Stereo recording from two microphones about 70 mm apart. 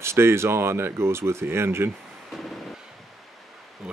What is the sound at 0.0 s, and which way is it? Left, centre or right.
Speech, right.